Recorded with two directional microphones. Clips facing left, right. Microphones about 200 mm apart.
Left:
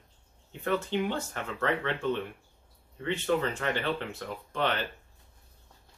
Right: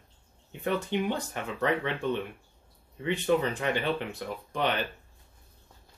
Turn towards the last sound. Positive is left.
turn(degrees=-15)  # may be behind; listen again after turning